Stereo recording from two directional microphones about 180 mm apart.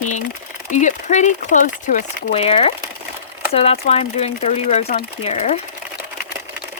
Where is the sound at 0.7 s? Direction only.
45° left (ahead or behind).